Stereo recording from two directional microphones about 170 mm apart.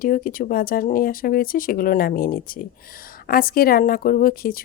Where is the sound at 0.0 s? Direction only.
55° left (ahead or behind).